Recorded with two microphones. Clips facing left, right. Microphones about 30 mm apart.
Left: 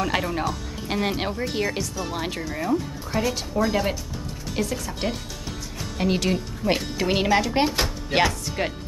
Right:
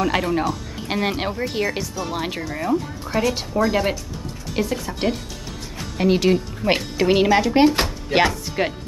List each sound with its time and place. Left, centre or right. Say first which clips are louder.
0.2 s speech: right 4 dB; centre
7.1 s speech: right 5 dB; centre